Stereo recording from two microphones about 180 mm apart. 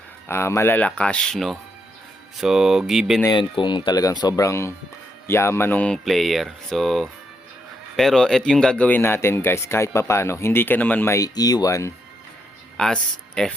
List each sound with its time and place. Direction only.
0.3 s speech: 15° left (ahead or behind); by 3.2 s centre (ahead or behind)
3.3 s speech: 25° left (ahead or behind)
12.7 s speech: 5° left (ahead or behind)